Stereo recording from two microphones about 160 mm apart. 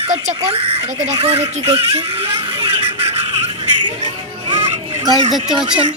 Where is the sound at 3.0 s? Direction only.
35° right (ahead or behind).